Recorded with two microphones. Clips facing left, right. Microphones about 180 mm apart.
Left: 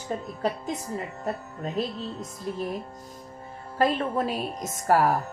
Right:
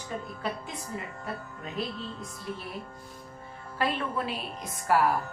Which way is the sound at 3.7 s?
40° left (ahead or behind).